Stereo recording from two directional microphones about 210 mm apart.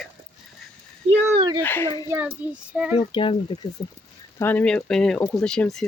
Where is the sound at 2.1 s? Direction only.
10° right (ahead or behind).